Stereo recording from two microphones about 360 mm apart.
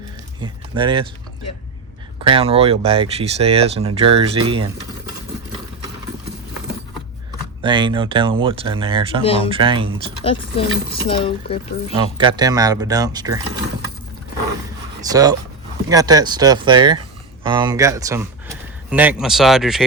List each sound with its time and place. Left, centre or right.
0.4 s speech: centre
2.2 s speech: centre
7.6 s speech: centre
10.2 s speech: centre
11.9 s speech: centre
15.0 s speech: centre